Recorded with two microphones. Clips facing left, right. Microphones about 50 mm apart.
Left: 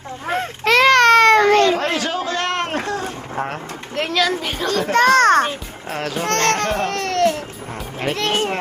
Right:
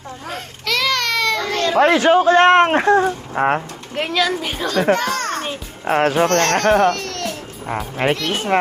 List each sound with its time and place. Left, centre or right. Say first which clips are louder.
0.3 s baby cry: left 7 dB; left
1.8 s a sound: right 9 dB; right
3.9 s speech: even; centre
4.9 s a child's voice: left 9 dB; left
5.9 s speech: right 7 dB; right
6.9 s baby cry: left 8 dB; left
8.1 s speech: even; left